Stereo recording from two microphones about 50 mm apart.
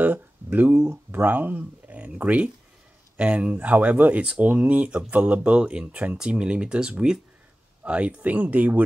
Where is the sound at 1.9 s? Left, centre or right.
Right.